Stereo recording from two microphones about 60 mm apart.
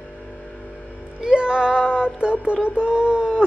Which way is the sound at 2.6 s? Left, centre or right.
Centre.